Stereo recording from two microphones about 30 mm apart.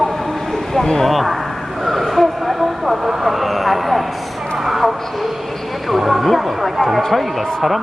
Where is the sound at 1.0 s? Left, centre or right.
Centre.